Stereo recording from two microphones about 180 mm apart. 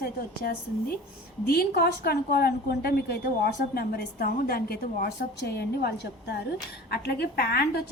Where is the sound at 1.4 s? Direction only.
60° left (ahead or behind).